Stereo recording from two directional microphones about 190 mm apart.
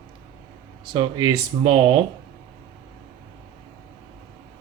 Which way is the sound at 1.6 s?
25° right (ahead or behind).